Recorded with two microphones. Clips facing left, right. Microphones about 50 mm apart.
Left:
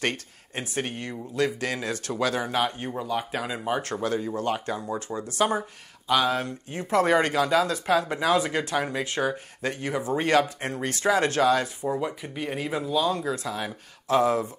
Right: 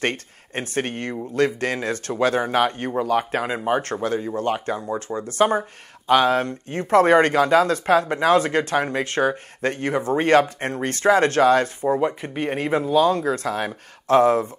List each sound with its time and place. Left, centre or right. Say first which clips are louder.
0.0 s speech: right 4 dB; right
9.6 s speech: right 6 dB; right